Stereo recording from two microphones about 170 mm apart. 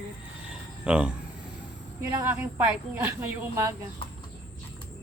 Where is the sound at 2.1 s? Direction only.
15° right (ahead or behind).